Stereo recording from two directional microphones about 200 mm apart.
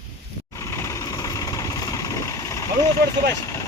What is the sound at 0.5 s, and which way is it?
Vehicle, 15° left (ahead or behind).